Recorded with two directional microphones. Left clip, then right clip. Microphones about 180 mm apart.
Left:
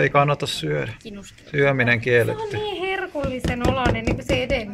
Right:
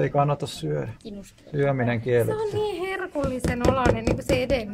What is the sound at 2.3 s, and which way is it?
Speech, 20° right (ahead or behind).